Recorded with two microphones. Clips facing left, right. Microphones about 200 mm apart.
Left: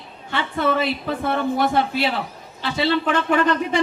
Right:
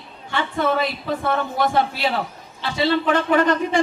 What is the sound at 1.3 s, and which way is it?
Speech, 45° left (ahead or behind).